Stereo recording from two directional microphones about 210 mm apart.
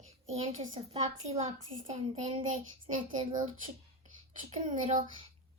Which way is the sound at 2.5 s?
35° right (ahead or behind).